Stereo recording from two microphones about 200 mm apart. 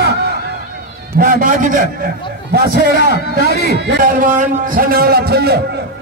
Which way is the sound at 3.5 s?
55° left (ahead or behind).